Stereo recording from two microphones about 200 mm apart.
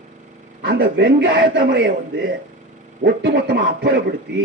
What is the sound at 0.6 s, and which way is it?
A man's voice, 50° right (ahead or behind).